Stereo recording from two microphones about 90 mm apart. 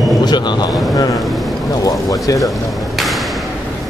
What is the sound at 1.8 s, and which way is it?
Speech, 40° left (ahead or behind).